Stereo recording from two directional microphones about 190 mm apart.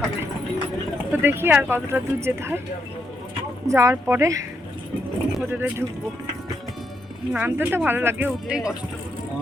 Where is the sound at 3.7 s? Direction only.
15° right (ahead or behind).